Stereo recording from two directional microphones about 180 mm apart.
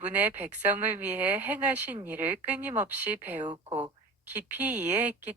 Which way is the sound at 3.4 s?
30° right (ahead or behind).